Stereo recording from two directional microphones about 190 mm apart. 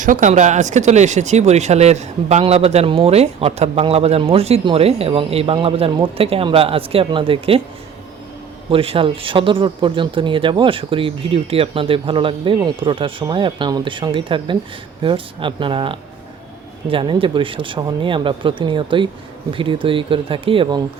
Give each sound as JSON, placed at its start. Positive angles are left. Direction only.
{"t": 0.0, "sound": "speech", "side_deg": -40}
{"t": 8.7, "sound": "speech", "side_deg": -30}